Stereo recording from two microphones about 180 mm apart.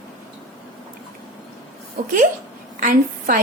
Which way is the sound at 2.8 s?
50° right (ahead or behind).